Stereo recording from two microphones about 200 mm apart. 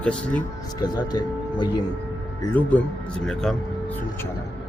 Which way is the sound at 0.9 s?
20° left (ahead or behind).